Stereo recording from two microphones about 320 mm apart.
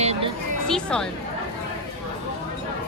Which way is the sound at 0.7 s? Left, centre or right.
Centre.